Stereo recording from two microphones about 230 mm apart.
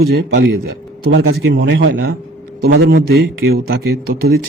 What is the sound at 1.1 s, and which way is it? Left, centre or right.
Speech, right.